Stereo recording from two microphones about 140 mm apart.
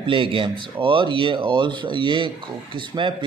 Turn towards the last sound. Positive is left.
turn(degrees=-35)  # may be behind; listen again after turning